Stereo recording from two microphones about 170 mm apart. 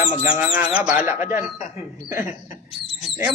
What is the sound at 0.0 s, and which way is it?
Bird, 50° left (ahead or behind).